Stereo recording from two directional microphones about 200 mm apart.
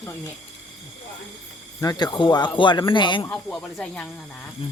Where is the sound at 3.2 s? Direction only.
5° left (ahead or behind).